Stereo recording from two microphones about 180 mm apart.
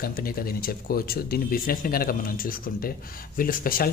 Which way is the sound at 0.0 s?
55° left (ahead or behind).